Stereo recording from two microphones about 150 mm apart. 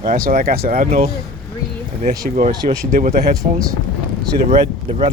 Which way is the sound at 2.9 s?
60° right (ahead or behind).